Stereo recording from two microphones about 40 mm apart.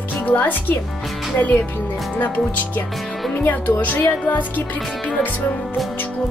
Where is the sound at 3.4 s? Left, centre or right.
Left.